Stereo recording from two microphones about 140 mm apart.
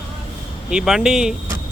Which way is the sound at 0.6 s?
5° right (ahead or behind).